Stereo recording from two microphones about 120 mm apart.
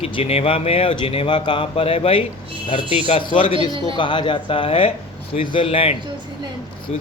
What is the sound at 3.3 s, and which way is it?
Speech, 45° left (ahead or behind).